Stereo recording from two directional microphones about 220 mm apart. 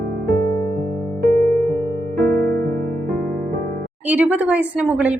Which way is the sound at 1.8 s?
45° right (ahead or behind).